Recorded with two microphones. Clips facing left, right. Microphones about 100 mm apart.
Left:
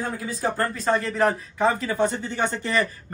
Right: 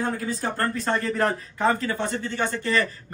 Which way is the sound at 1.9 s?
15° left (ahead or behind).